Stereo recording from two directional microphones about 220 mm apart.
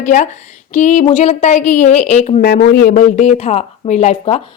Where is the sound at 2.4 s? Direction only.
45° left (ahead or behind).